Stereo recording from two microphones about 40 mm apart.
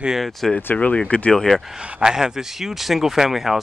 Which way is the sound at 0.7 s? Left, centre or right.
Left.